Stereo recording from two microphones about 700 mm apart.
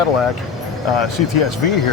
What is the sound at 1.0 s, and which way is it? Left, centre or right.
Speech, left.